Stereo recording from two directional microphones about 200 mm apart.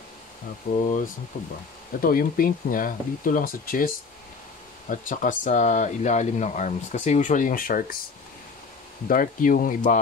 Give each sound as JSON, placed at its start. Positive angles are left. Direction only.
{"t": 0.7, "sound": "speech", "side_deg": 35}
{"t": 9.0, "sound": "speech", "side_deg": 45}